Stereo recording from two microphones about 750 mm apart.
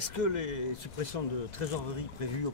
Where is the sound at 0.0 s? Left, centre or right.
Left.